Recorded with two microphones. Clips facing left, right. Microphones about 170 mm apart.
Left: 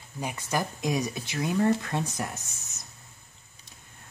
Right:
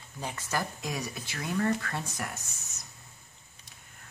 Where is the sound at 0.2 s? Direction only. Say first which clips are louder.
Left 3 dB; 15° left (ahead or behind).